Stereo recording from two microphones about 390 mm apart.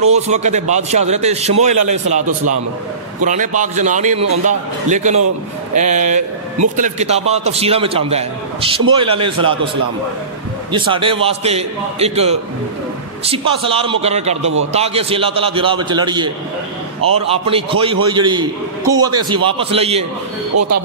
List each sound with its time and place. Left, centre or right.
0.0 s a man's voice: centre
10.7 s a man's voice: centre
17.3 s a man's voice: centre